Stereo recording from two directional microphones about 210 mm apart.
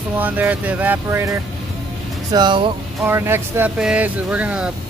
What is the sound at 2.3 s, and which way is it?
Speech, 20° right (ahead or behind).